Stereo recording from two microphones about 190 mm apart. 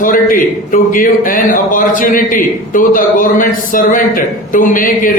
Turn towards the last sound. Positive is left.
turn(degrees=45)  # may be behind; listen again after turning